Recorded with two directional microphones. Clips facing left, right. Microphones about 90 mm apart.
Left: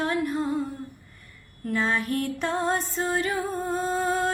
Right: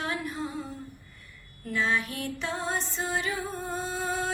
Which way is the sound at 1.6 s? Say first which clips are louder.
Left 2 dB; 40° left (ahead or behind).